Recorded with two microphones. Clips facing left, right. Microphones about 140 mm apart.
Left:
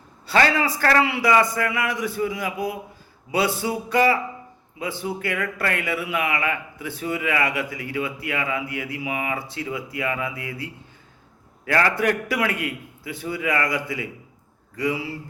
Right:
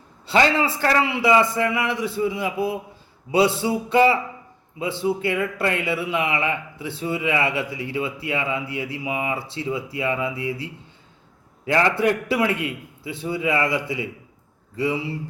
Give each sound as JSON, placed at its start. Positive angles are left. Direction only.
{"t": 0.3, "sound": "a man's voice", "side_deg": -20}